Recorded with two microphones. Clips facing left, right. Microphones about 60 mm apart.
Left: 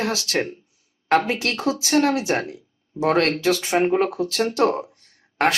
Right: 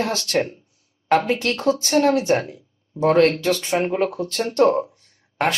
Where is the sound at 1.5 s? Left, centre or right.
Centre.